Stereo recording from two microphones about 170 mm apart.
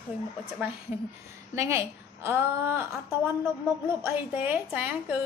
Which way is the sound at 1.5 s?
15° right (ahead or behind).